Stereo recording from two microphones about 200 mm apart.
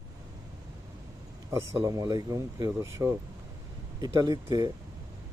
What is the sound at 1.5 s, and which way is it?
Speech, 15° right (ahead or behind).